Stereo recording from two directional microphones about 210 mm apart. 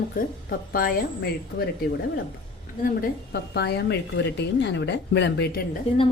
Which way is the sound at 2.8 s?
45° left (ahead or behind).